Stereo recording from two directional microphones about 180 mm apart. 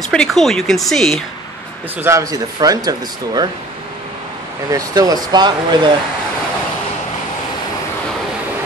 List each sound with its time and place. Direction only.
0.1 s speech: centre (ahead or behind)
2.0 s speech: 20° right (ahead or behind)
4.6 s speech: 20° right (ahead or behind)